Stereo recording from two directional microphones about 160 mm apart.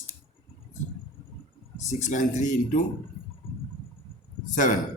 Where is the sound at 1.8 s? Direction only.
50° left (ahead or behind).